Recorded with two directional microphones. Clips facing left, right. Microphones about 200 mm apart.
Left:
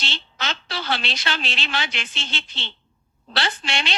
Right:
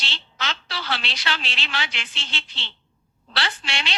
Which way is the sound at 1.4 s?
50° left (ahead or behind).